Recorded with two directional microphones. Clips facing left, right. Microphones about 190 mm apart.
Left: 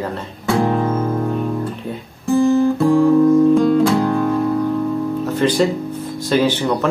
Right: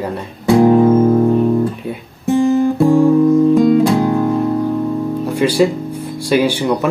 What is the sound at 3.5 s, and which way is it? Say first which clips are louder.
Music: right 2 dB; 15° right (ahead or behind).